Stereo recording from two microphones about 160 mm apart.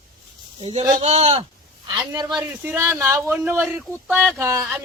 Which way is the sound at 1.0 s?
40° right (ahead or behind).